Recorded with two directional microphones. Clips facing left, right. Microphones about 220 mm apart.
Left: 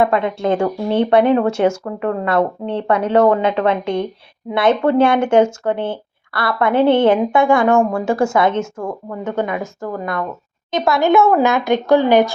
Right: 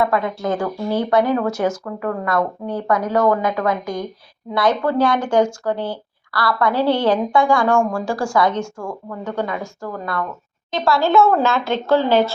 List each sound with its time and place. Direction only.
0.0 s speech: 25° left (ahead or behind)